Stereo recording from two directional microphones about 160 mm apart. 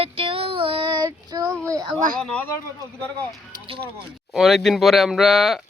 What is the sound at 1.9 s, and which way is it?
Speech, 60° right (ahead or behind).